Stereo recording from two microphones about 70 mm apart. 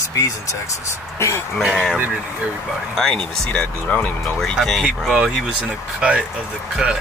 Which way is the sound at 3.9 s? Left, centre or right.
Left.